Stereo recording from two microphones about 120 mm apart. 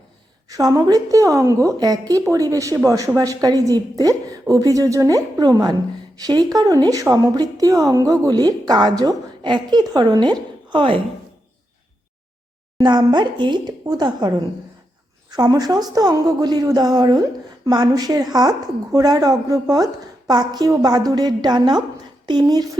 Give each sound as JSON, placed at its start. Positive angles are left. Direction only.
{"t": 0.4, "sound": "a woman's voice", "side_deg": -30}
{"t": 12.8, "sound": "a woman's voice", "side_deg": -35}